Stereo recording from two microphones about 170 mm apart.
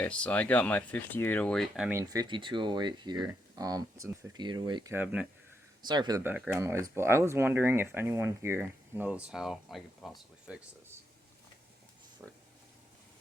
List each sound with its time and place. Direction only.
0.0 s speech: 5° left (ahead or behind)
2.0 s speech: 20° right (ahead or behind)
4.9 s speech: 10° right (ahead or behind)
5.8 s speech: 25° right (ahead or behind)
6.3 s speech: 5° right (ahead or behind)
6.6 s speech: 15° right (ahead or behind)
12.2 s a sound: 10° right (ahead or behind)